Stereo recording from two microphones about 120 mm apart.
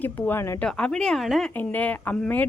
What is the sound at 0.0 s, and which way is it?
Speech, 15° left (ahead or behind).